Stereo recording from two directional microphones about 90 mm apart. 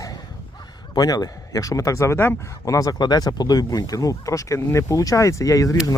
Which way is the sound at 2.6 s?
40° left (ahead or behind).